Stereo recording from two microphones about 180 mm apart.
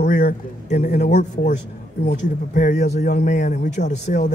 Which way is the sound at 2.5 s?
45° left (ahead or behind).